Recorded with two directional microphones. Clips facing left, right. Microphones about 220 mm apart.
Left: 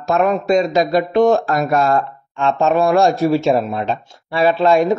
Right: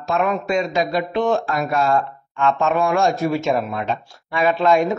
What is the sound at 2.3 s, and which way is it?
Speech, 35° left (ahead or behind).